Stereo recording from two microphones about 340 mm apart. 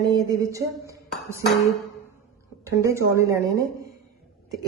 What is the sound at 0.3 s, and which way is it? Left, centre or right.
A woman's voice, centre.